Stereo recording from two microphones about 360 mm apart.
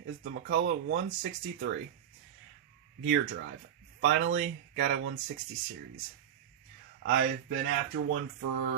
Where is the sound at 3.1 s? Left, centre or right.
Right.